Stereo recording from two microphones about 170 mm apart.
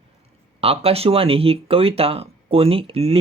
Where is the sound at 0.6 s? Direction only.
35° right (ahead or behind).